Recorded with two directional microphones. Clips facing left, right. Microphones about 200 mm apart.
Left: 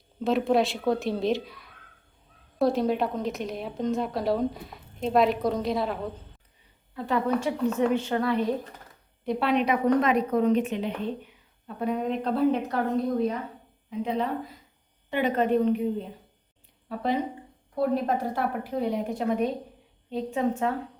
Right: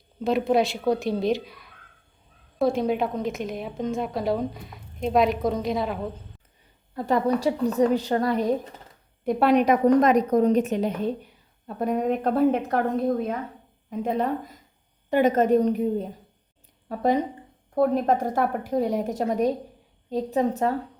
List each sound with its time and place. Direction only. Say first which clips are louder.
0.2 s a woman's voice: right 1 dB; centre (ahead or behind)
6.9 s a woman's voice: right 3 dB; 40° right (ahead or behind)